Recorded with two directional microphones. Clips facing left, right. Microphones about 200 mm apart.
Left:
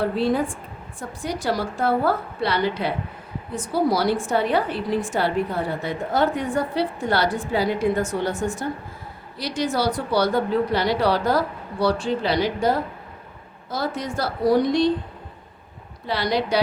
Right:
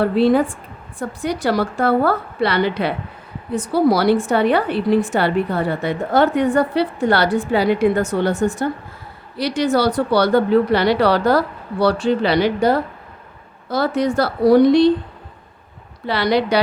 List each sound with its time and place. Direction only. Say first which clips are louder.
0.0 s a woman's voice: right 7 dB; 70° right (ahead or behind)
16.0 s a woman's voice: right 5 dB; 70° right (ahead or behind)